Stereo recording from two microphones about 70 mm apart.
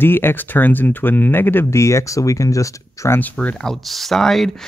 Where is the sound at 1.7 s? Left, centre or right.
Left.